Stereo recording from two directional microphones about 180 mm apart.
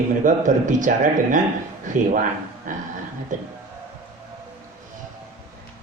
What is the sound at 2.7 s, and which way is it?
Speech, 45° right (ahead or behind).